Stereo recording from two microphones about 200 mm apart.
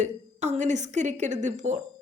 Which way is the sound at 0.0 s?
35° right (ahead or behind).